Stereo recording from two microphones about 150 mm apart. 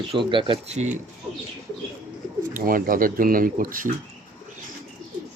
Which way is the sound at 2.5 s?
70° right (ahead or behind).